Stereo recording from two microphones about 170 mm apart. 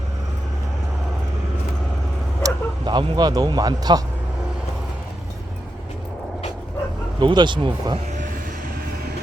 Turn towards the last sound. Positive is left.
turn(degrees=-30)  # may be behind; listen again after turning